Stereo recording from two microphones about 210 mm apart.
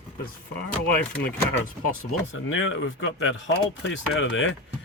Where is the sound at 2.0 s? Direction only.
70° left (ahead or behind).